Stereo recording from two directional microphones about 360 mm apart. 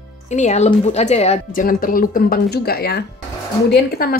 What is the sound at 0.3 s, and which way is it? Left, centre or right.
Speech, centre.